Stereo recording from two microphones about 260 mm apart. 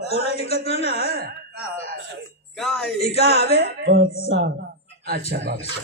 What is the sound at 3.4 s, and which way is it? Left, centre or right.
Music, right.